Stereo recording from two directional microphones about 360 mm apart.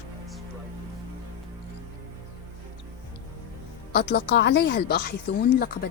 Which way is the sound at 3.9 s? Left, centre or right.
Left.